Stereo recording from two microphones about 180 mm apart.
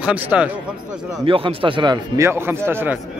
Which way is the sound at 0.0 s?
5° right (ahead or behind).